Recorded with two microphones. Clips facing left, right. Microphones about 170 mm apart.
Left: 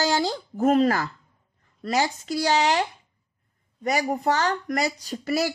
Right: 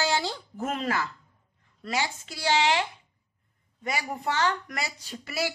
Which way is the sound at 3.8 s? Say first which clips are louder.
Left 7 dB; 40° left (ahead or behind).